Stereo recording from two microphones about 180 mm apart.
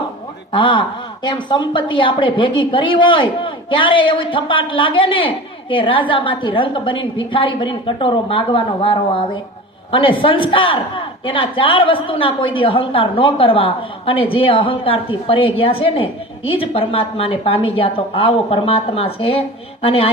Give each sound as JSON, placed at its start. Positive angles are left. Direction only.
{"t": 0.5, "sound": "a woman's voice", "side_deg": 25}